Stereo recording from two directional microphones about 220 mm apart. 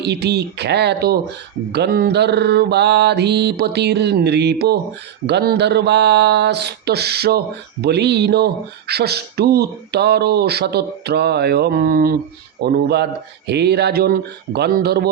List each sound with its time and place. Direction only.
0.0 s speech: 50° right (ahead or behind)